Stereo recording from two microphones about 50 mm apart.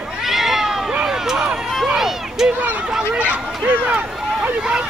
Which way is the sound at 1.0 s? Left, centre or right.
Centre.